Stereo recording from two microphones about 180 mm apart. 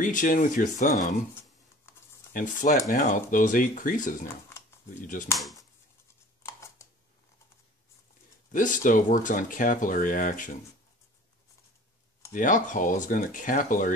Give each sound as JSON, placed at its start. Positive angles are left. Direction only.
{"t": 0.0, "sound": "speech", "side_deg": 45}
{"t": 2.3, "sound": "speech", "side_deg": 45}
{"t": 6.4, "sound": "a sound", "side_deg": 15}
{"t": 8.5, "sound": "speech", "side_deg": 50}
{"t": 12.3, "sound": "speech", "side_deg": 45}